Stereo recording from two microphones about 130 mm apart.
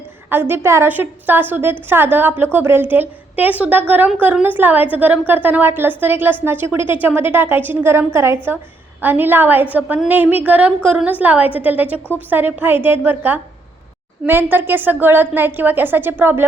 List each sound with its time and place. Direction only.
0.3 s a woman's voice: 15° right (ahead or behind)